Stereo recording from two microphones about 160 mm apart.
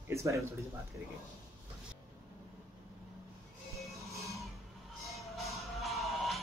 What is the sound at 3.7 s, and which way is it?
Music, centre (ahead or behind).